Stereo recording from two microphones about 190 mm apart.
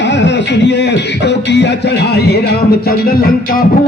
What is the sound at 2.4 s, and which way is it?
Music, 55° left (ahead or behind).